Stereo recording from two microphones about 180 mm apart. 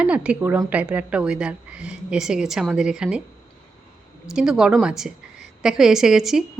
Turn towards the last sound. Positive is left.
turn(degrees=0)  # may be behind; listen again after turning